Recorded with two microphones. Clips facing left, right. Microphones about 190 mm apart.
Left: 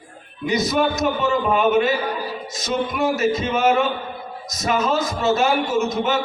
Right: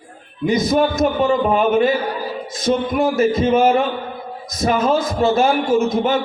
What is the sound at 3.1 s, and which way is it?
Speech, 55° right (ahead or behind).